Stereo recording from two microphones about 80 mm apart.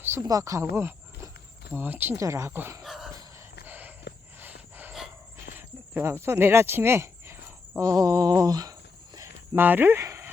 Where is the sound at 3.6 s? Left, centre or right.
Right.